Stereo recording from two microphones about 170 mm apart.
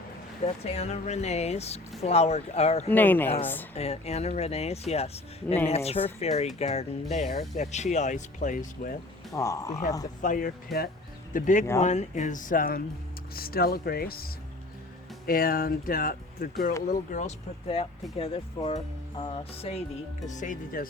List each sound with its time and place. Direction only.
0.4 s speech: 40° left (ahead or behind)
2.9 s speech: 10° left (ahead or behind)
3.8 s speech: 40° left (ahead or behind)
9.3 s speech: 20° left (ahead or behind)
10.2 s speech: 50° left (ahead or behind)
15.3 s speech: 60° left (ahead or behind); by 19.8 s 35° left (ahead or behind)
20.2 s speech: 45° left (ahead or behind)